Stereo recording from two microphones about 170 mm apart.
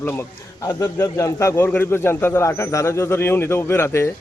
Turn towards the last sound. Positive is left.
turn(degrees=15)  # may be behind; listen again after turning